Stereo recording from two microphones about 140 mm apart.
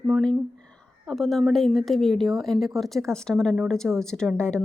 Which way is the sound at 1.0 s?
Centre (ahead or behind).